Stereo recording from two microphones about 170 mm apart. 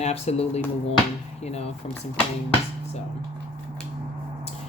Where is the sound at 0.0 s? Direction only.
40° left (ahead or behind).